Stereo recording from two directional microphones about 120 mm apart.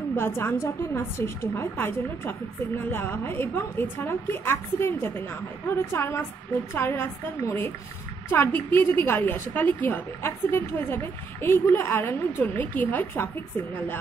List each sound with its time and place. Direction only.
0.1 s a woman's voice: 20° left (ahead or behind)